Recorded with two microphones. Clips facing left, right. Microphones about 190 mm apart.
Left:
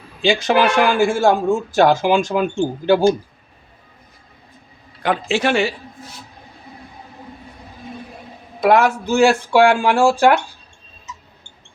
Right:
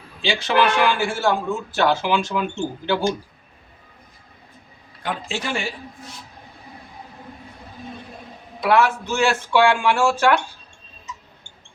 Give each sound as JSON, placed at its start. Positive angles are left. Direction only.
{"t": 0.2, "sound": "a man's voice", "side_deg": 45}
{"t": 5.0, "sound": "speech", "side_deg": 75}
{"t": 8.6, "sound": "speech", "side_deg": 40}